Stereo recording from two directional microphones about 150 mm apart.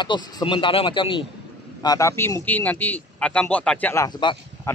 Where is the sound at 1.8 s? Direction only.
25° left (ahead or behind).